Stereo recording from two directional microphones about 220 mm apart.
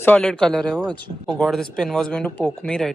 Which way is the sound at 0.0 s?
5° left (ahead or behind).